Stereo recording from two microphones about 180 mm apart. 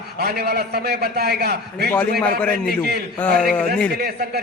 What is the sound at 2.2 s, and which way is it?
Speech, 5° left (ahead or behind).